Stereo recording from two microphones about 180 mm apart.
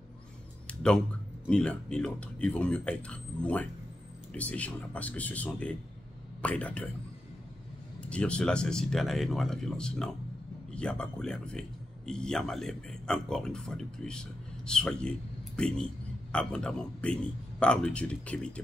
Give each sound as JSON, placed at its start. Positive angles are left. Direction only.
{"t": 0.7, "sound": "a sound", "side_deg": 5}
{"t": 1.5, "sound": "speech", "side_deg": 5}
{"t": 8.0, "sound": "a man's voice", "side_deg": 5}